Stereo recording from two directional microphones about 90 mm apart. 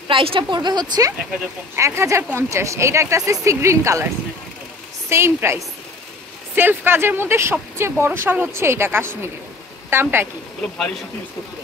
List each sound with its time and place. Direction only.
0.1 s a woman's voice: 75° right (ahead or behind); by 1.1 s 50° right (ahead or behind)
1.8 s speech: 30° right (ahead or behind)
5.1 s speech: 30° right (ahead or behind)